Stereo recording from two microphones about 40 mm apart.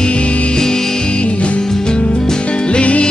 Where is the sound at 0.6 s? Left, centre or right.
Centre.